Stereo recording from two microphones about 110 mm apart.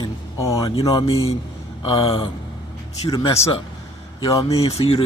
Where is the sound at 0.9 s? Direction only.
50° left (ahead or behind).